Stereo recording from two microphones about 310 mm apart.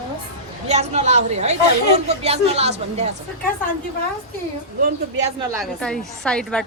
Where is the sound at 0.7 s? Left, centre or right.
Right.